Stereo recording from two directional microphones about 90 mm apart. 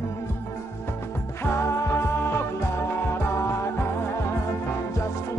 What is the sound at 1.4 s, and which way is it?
Music, 30° left (ahead or behind).